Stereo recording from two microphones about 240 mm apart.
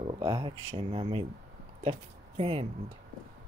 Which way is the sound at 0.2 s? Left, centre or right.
Right.